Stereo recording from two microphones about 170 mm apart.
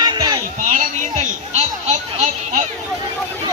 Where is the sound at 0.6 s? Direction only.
50° right (ahead or behind).